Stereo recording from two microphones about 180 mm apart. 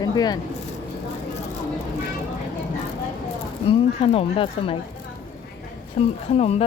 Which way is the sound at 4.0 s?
30° left (ahead or behind).